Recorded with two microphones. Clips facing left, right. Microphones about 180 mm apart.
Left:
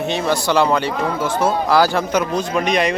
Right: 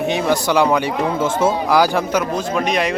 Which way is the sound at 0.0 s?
15° right (ahead or behind).